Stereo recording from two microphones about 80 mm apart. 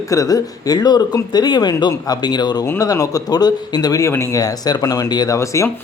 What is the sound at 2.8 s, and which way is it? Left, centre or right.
Speech, left.